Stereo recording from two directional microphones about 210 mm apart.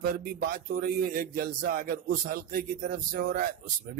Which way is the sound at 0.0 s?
45° right (ahead or behind).